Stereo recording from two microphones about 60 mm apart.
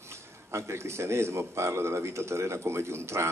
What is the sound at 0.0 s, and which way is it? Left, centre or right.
A man's voice, right.